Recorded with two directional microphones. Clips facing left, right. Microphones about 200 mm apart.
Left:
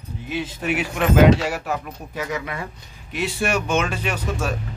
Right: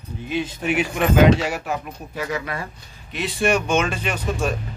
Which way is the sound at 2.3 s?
15° left (ahead or behind).